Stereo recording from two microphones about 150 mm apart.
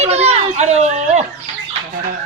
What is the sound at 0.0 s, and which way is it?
Children playing, 45° right (ahead or behind).